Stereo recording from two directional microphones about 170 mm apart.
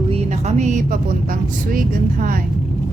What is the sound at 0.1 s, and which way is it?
Speech, 40° right (ahead or behind).